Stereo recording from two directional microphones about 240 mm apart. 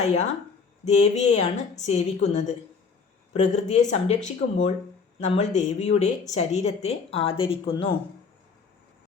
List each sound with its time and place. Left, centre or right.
0.0 s speech: left